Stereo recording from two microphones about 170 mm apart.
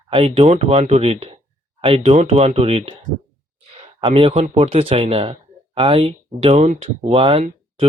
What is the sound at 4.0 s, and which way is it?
Speech, 30° right (ahead or behind).